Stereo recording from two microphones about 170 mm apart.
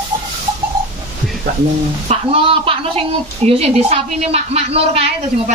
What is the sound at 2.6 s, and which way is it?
A woman's voice, 35° right (ahead or behind).